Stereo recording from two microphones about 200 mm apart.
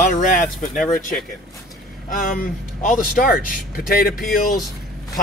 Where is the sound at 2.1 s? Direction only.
45° left (ahead or behind).